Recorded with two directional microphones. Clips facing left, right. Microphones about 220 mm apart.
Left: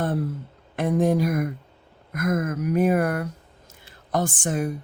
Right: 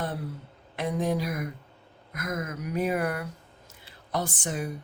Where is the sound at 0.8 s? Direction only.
50° left (ahead or behind).